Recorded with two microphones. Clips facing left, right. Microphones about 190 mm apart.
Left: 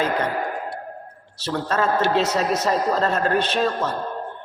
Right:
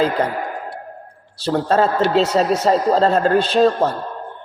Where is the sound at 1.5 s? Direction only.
30° right (ahead or behind).